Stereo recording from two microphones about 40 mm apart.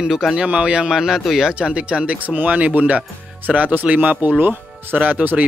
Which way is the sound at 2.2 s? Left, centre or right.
Right.